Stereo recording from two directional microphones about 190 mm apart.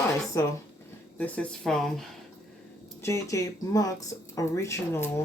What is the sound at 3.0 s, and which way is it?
Speech, 15° left (ahead or behind).